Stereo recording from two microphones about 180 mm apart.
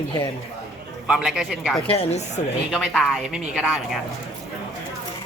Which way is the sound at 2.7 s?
Centre (ahead or behind).